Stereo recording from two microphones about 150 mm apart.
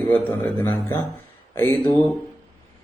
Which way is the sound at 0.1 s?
15° left (ahead or behind).